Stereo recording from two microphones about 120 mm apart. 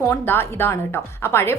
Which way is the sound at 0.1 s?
20° left (ahead or behind).